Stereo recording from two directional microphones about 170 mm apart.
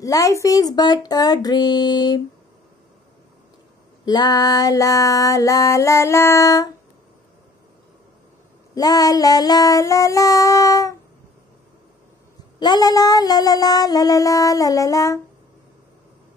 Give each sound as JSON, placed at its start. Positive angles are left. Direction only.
{"t": 0.0, "sound": "female singing", "side_deg": 20}
{"t": 4.0, "sound": "female singing", "side_deg": 25}
{"t": 8.7, "sound": "female singing", "side_deg": 20}
{"t": 12.5, "sound": "female singing", "side_deg": 25}